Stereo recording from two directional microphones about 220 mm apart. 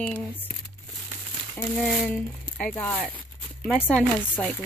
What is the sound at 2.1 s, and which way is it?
Speech, 5° left (ahead or behind).